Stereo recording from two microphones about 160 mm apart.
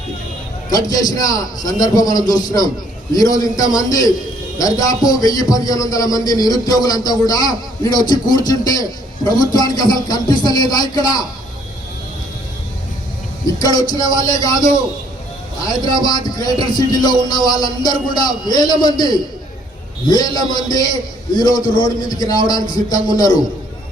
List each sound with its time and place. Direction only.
0.7 s a man's voice: 20° left (ahead or behind)
13.6 s a man's voice: 25° left (ahead or behind)